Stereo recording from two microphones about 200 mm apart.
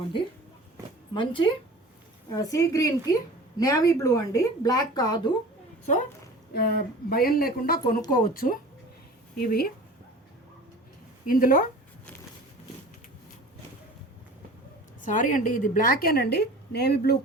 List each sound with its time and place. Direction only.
1.1 s a woman's voice: 25° left (ahead or behind)
6.5 s a woman's voice: 50° left (ahead or behind)
11.3 s a woman's voice: 45° left (ahead or behind)
15.0 s a woman's voice: 40° left (ahead or behind)